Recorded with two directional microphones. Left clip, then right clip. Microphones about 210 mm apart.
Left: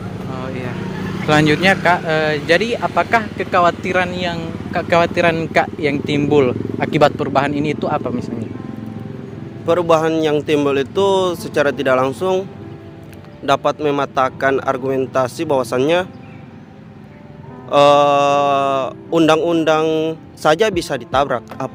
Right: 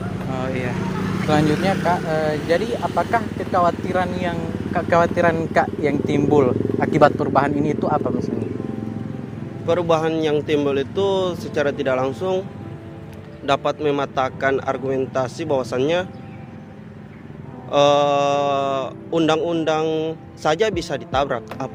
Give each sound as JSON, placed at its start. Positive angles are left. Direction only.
{"t": 0.3, "sound": "vehicle", "side_deg": -5}
{"t": 1.3, "sound": "speech", "side_deg": 45}
{"t": 9.6, "sound": "speech", "side_deg": 45}
{"t": 17.7, "sound": "speech", "side_deg": 45}